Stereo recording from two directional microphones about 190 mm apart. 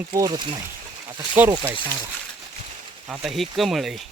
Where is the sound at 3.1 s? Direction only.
Centre (ahead or behind).